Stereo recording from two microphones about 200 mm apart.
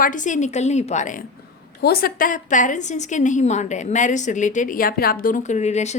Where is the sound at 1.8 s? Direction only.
50° left (ahead or behind); by 6.0 s 35° left (ahead or behind).